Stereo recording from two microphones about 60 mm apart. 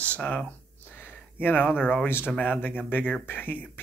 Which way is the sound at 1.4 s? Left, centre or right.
Left.